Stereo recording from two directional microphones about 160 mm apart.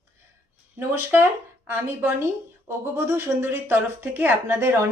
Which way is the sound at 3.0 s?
15° right (ahead or behind).